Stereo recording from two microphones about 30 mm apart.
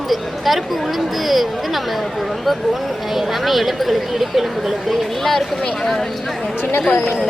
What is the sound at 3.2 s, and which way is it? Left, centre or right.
Speech, centre.